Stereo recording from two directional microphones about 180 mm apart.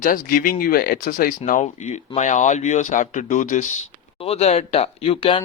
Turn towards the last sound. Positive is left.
turn(degrees=30)  # may be behind; listen again after turning